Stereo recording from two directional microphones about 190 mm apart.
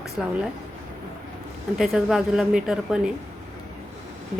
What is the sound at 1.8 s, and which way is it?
A woman's voice, 5° right (ahead or behind).